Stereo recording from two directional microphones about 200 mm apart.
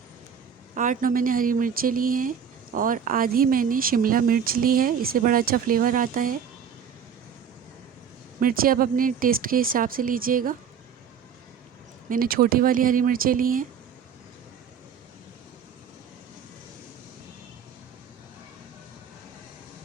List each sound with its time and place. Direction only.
0.7 s speech: 40° right (ahead or behind)
8.4 s speech: 45° right (ahead or behind)
12.0 s speech: 45° right (ahead or behind)